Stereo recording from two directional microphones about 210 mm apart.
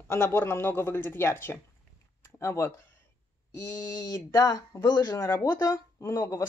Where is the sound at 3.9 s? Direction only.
15° left (ahead or behind).